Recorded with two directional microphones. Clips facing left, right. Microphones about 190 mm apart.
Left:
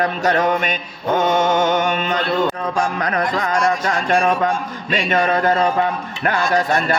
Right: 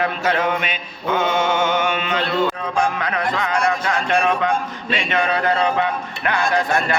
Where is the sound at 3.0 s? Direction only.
40° left (ahead or behind).